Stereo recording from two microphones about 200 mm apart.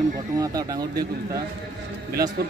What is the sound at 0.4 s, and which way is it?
Speech, 20° right (ahead or behind).